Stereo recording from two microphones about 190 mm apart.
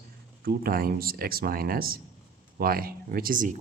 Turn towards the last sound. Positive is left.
turn(degrees=-45)  # may be behind; listen again after turning